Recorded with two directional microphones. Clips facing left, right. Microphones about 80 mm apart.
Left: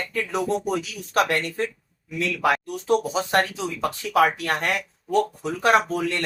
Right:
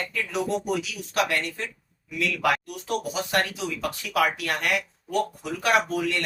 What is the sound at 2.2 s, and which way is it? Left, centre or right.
Speech, left.